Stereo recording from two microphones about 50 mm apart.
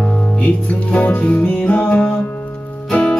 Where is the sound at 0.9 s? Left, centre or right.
Left.